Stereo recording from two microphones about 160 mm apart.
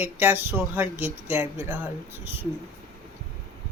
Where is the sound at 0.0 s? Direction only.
15° right (ahead or behind).